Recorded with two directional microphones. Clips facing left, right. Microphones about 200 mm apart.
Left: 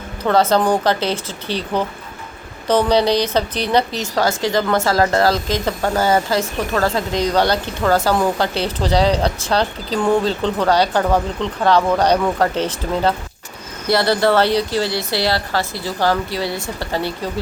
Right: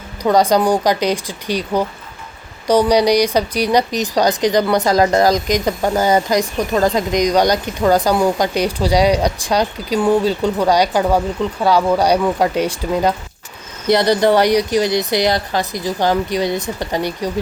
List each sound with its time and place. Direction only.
0.2 s speech: 15° right (ahead or behind)